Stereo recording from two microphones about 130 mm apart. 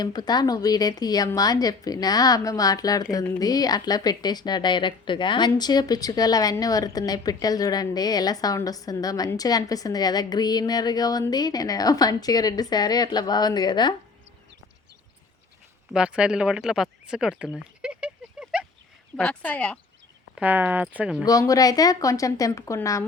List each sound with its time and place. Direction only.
0.0 s a woman's voice: 30° left (ahead or behind)
15.9 s speech: 10° right (ahead or behind)
17.6 s a sound: 10° right (ahead or behind)
19.1 s speech: 10° left (ahead or behind)
20.3 s speech: 15° right (ahead or behind)
21.2 s a woman's voice: 25° left (ahead or behind)